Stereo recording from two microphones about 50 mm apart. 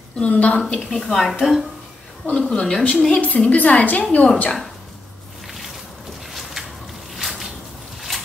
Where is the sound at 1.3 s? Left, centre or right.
Centre.